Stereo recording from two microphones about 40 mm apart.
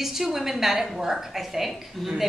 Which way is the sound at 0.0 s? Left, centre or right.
Centre.